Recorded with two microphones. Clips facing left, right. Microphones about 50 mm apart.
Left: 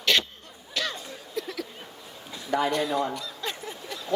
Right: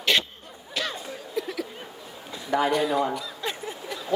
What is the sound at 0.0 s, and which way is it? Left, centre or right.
Cough, centre.